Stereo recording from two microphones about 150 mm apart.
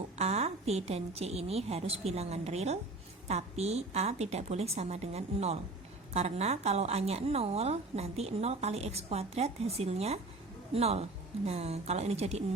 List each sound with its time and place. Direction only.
0.2 s a woman's voice: 45° right (ahead or behind)